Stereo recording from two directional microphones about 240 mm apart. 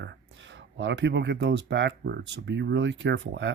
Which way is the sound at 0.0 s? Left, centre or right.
Right.